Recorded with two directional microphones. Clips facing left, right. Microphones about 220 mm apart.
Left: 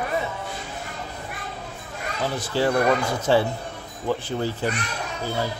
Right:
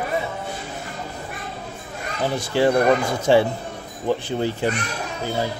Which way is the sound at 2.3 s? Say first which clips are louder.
Right 4 dB; 15° right (ahead or behind).